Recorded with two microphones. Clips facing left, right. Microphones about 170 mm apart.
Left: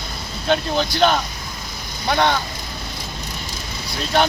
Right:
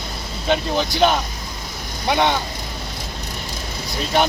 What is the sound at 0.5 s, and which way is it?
Speech, 10° right (ahead or behind).